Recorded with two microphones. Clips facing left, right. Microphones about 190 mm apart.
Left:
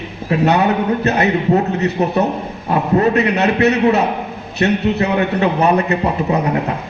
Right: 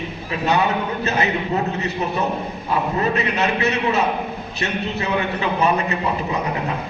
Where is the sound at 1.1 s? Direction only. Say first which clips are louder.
Left 5 dB; 65° left (ahead or behind).